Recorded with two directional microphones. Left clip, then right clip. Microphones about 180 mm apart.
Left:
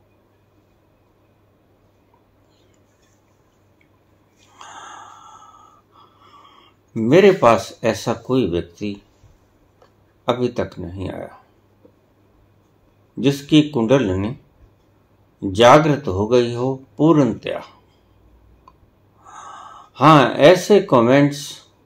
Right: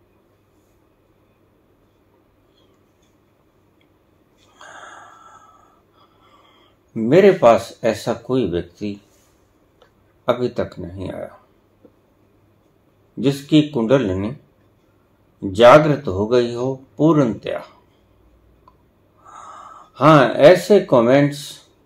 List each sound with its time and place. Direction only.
4.6 s wheeze: 15° left (ahead or behind)
6.9 s speech: 15° left (ahead or behind)
10.2 s speech: 15° left (ahead or behind)
13.2 s speech: 15° left (ahead or behind)
15.4 s speech: 15° left (ahead or behind)
19.2 s speech: 15° left (ahead or behind)